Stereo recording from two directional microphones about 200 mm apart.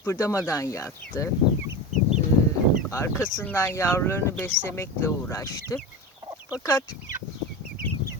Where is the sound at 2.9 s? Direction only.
15° left (ahead or behind).